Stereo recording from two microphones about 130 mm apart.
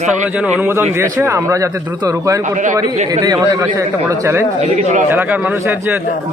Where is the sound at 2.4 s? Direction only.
75° right (ahead or behind).